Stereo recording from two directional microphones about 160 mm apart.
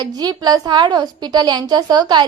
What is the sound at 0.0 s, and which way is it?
A woman's voice, 25° right (ahead or behind).